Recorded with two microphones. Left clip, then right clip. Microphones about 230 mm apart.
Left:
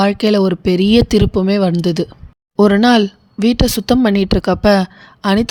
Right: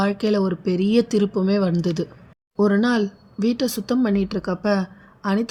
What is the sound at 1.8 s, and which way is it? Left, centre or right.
Speech, left.